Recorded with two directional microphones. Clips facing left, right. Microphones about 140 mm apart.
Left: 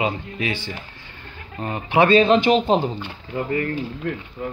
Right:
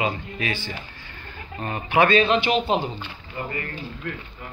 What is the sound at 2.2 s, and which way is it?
Speech, 35° left (ahead or behind).